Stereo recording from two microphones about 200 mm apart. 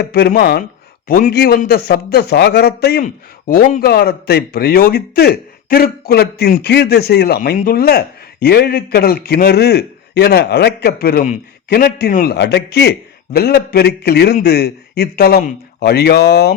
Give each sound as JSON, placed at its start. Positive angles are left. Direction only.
{"t": 0.0, "sound": "a man's voice", "side_deg": 50}